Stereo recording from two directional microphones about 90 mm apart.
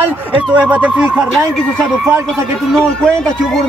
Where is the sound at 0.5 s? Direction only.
15° right (ahead or behind).